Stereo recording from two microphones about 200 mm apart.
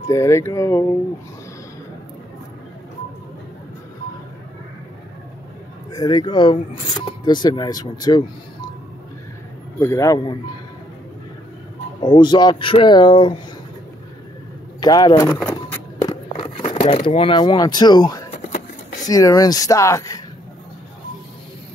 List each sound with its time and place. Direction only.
0.1 s speech: 15° left (ahead or behind)
5.9 s speech: 20° left (ahead or behind)
9.8 s speech: 15° left (ahead or behind)
12.0 s speech: 20° left (ahead or behind)
14.8 s speech: 20° left (ahead or behind)
15.2 s speech: 5° left (ahead or behind)
15.7 s walk: 15° left (ahead or behind)
16.3 s speech: 30° left (ahead or behind); by 20.2 s 15° left (ahead or behind)